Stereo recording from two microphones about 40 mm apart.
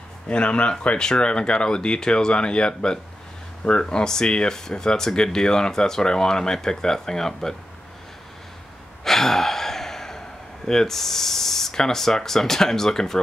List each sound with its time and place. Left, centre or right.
0.3 s speech: left; by 7.5 s centre
9.0 s gasp: centre
10.7 s speech: centre